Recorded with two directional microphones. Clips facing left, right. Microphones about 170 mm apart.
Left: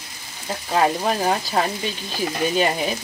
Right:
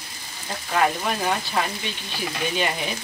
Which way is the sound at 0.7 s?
30° left (ahead or behind).